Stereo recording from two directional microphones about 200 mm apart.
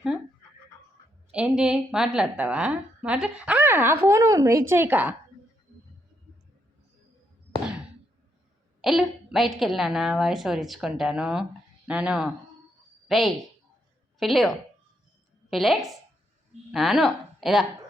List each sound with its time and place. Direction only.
1.3 s a woman's voice: 5° right (ahead or behind)
8.8 s a woman's voice: centre (ahead or behind)